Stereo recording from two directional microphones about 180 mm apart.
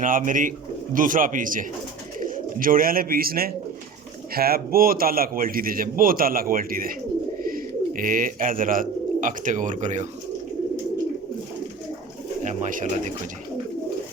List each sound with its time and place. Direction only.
0.0 s a man's voice: 45° right (ahead or behind)
12.4 s a man's voice: 45° right (ahead or behind)